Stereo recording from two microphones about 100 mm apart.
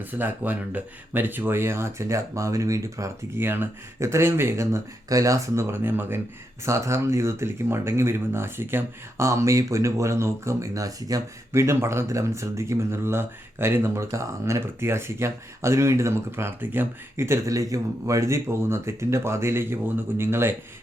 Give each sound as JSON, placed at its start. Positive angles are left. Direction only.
{"t": 0.1, "sound": "speech", "side_deg": -20}